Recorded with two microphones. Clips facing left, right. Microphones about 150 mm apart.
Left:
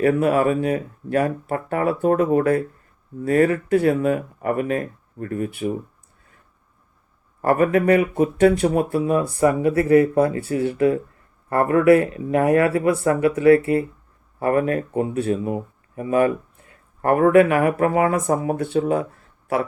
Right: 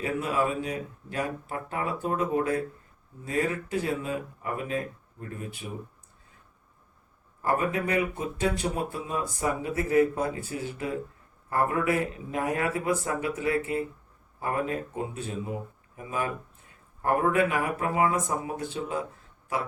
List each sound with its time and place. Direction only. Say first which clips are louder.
0.0 s speech: left 10 dB; 65° left (ahead or behind)
7.4 s speech: left 10 dB; 60° left (ahead or behind)